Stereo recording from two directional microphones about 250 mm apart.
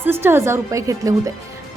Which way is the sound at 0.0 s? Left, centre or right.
Centre.